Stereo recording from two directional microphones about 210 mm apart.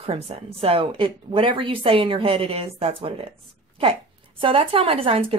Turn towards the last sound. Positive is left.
turn(degrees=-25)  # may be behind; listen again after turning